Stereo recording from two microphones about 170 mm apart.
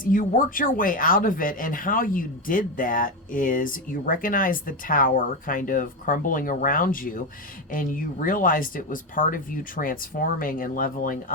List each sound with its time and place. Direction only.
0.0 s speech: 50° left (ahead or behind)